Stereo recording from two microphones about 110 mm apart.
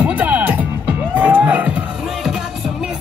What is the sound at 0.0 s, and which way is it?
Music, 15° right (ahead or behind).